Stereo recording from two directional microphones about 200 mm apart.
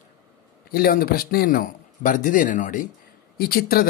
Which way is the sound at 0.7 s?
50° left (ahead or behind).